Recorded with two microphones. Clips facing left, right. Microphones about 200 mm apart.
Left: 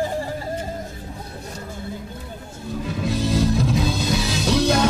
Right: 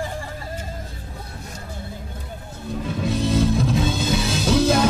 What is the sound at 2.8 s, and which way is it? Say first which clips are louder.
Music: right 1 dB; centre (ahead or behind).